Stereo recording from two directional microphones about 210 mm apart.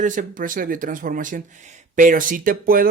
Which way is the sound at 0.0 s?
35° right (ahead or behind).